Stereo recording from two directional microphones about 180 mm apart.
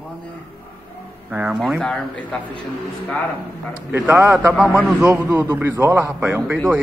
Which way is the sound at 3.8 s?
10° right (ahead or behind).